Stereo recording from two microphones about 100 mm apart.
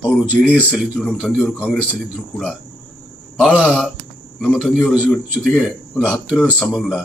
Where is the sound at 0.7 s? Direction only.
10° right (ahead or behind).